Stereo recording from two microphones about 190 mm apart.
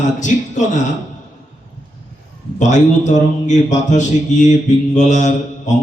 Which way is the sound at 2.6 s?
40° left (ahead or behind).